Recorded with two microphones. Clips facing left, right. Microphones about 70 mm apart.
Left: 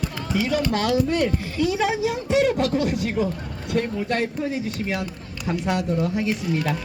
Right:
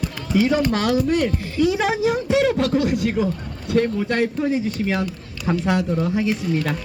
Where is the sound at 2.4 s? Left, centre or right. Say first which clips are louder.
Right 2 dB; centre.